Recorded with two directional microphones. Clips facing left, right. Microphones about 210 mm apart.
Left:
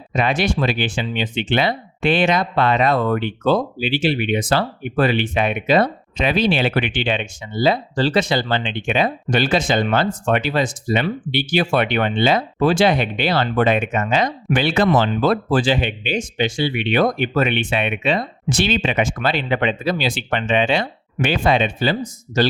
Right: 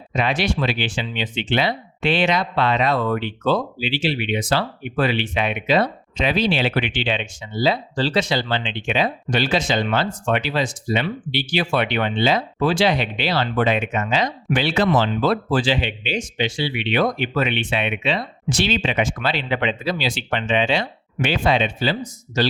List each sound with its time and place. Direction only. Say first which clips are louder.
0.1 s speech: left 2 dB; 50° left (ahead or behind)